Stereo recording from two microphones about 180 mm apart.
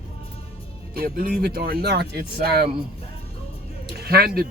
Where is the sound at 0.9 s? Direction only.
55° right (ahead or behind).